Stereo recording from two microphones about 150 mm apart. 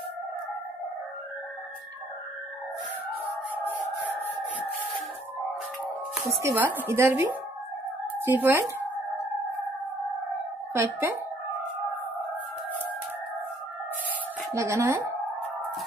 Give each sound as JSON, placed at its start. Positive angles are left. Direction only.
{"t": 6.4, "sound": "a woman's voice", "side_deg": -10}
{"t": 10.7, "sound": "a woman's voice", "side_deg": -15}
{"t": 14.5, "sound": "a woman's voice", "side_deg": -20}